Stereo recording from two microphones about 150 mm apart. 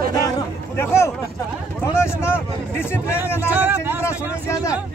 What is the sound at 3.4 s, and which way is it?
Speech, 15° right (ahead or behind).